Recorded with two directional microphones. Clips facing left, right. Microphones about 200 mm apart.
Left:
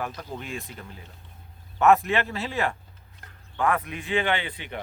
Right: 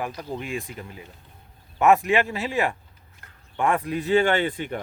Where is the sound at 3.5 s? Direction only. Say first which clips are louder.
Right 3 dB; 25° right (ahead or behind); by 4.8 s 45° right (ahead or behind).